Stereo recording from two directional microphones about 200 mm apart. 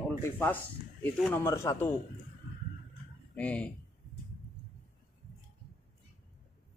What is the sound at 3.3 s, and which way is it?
Speech, 5° left (ahead or behind).